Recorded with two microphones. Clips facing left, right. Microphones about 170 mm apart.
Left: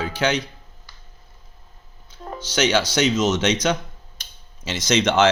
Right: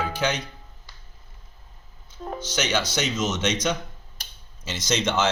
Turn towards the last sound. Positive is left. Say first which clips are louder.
# left 6 dB
turn(degrees=75)  # may be behind; listen again after turning